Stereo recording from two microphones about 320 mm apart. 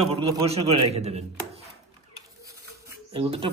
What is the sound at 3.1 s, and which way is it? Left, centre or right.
Speech, centre.